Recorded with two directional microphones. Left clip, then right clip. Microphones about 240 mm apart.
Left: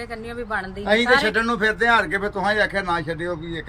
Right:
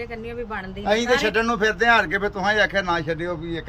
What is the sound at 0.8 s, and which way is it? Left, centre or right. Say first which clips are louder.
Speech: left 2 dB; right.